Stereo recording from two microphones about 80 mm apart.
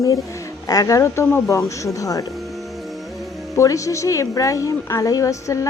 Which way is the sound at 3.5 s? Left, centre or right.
Left.